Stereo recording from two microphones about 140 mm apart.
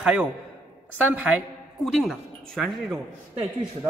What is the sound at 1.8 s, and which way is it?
A man's voice, centre (ahead or behind).